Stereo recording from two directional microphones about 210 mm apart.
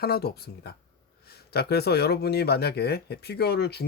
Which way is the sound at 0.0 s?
50° left (ahead or behind).